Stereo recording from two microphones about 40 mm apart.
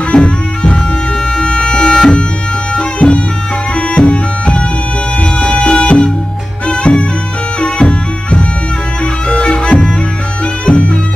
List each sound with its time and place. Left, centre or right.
0.1 s music: left
10.6 s bagpipes: left